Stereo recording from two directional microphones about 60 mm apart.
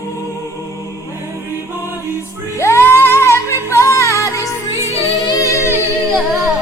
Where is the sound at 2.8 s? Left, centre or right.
Left.